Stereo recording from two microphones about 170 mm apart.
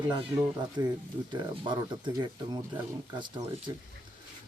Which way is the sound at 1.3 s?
25° right (ahead or behind).